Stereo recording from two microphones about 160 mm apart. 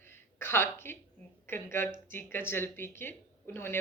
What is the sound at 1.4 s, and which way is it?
A woman's voice, 15° left (ahead or behind).